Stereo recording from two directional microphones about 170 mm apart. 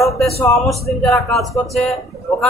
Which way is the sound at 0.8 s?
Centre (ahead or behind).